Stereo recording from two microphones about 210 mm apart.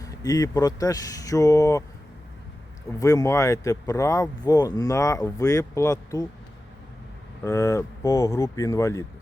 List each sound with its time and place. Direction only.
0.0 s speech: 15° left (ahead or behind)
3.0 s speech: 15° left (ahead or behind)
7.4 s speech: 10° left (ahead or behind)